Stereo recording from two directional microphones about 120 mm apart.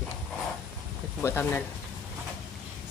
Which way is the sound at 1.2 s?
15° left (ahead or behind).